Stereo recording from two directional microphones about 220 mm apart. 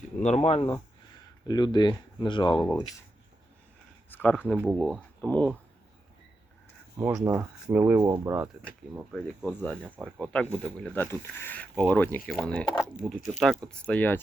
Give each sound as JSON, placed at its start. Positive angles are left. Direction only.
{"t": 0.2, "sound": "speech", "side_deg": 30}
{"t": 4.1, "sound": "speech", "side_deg": 10}
{"t": 7.3, "sound": "speech", "side_deg": -10}